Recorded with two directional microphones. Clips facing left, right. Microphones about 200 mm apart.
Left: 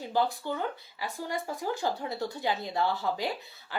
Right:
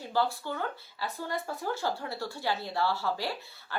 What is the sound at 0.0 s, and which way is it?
Speech, 15° left (ahead or behind).